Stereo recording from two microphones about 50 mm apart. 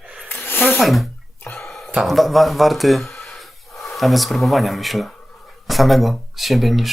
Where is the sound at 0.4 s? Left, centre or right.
Left.